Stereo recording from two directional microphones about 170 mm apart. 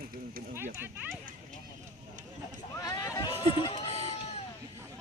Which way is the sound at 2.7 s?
20° left (ahead or behind).